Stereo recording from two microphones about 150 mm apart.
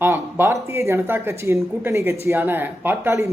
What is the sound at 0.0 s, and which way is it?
Speech, 15° right (ahead or behind).